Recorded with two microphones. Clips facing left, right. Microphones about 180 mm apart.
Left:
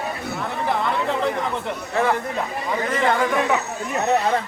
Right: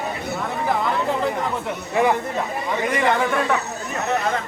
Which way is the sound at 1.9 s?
15° right (ahead or behind).